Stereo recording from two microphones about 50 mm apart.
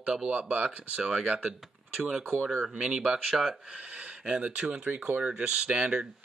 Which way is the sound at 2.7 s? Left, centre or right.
Centre.